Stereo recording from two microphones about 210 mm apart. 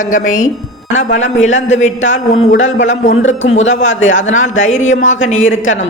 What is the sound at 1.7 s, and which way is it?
A woman's voice, 35° left (ahead or behind).